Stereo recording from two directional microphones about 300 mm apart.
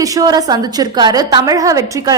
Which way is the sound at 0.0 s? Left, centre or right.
Centre.